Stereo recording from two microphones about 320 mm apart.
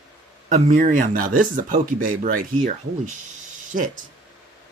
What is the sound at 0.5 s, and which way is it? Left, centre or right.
Speech, right.